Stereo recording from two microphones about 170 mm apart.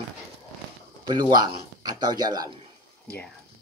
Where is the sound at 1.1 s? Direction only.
25° right (ahead or behind).